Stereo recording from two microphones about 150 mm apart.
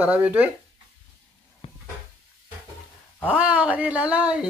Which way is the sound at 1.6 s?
40° left (ahead or behind).